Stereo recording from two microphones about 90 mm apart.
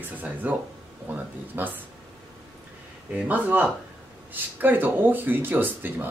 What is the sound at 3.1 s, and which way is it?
Speech, 15° right (ahead or behind).